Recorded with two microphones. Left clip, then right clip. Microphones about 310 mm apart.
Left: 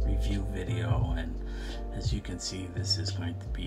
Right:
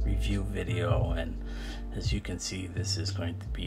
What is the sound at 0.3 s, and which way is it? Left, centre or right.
Speech, centre.